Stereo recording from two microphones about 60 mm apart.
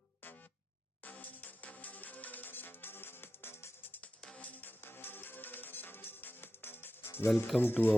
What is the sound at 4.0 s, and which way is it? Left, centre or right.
Music, centre.